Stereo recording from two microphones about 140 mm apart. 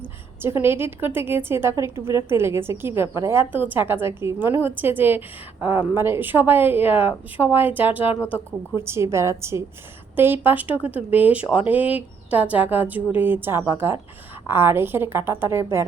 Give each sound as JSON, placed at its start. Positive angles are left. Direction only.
{"t": 0.4, "sound": "a woman's voice", "side_deg": -15}